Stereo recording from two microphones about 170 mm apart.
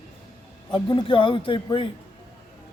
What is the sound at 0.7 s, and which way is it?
A man's voice, 30° left (ahead or behind).